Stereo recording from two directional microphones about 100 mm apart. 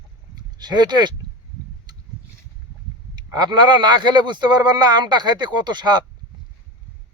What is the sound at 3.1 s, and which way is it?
Speech, 45° right (ahead or behind).